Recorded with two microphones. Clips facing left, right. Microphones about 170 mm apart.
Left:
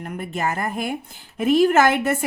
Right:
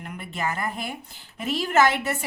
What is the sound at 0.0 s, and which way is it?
A woman's voice, 45° left (ahead or behind).